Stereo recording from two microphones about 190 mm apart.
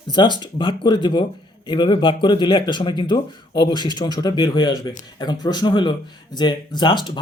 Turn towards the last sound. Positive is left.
turn(degrees=25)  # may be behind; listen again after turning